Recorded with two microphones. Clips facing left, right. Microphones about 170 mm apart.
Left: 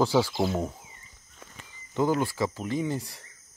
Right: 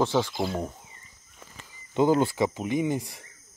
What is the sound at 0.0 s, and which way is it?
Speech, centre (ahead or behind).